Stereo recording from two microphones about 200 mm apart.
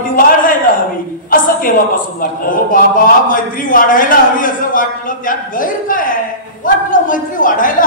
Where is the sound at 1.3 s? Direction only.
45° left (ahead or behind).